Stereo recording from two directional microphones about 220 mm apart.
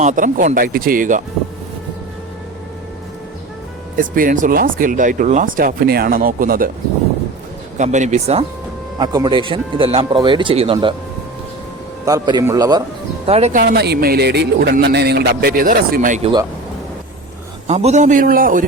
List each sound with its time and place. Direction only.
0.0 s speech: 35° right (ahead or behind)
3.9 s speech: 40° right (ahead or behind)
7.8 s speech: 35° right (ahead or behind)
9.0 s speech: 20° right (ahead or behind)
12.0 s a man's voice: 15° right (ahead or behind)
13.2 s speech: 30° right (ahead or behind)
13.6 s speech: 45° right (ahead or behind)
17.7 s speech: 30° right (ahead or behind)